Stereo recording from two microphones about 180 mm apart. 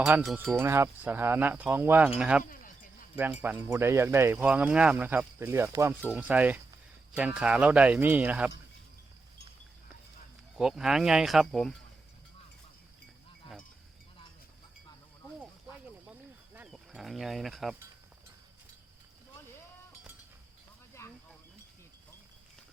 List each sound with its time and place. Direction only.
0.0 s speech: centre (ahead or behind)
0.6 s speech: 15° right (ahead or behind)
2.4 s a sound: 50° left (ahead or behind)
3.4 s speech: 10° right (ahead or behind)
10.6 s speech: 5° right (ahead or behind)
16.6 s livestock: 5° right (ahead or behind)
21.0 s a sound: 15° left (ahead or behind)